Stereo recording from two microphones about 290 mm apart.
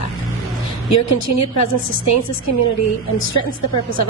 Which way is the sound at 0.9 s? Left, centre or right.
Left.